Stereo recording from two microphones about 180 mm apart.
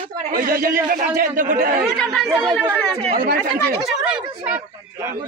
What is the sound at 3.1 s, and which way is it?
Speech, 50° right (ahead or behind).